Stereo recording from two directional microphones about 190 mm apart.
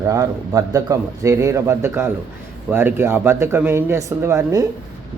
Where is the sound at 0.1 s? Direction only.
20° right (ahead or behind).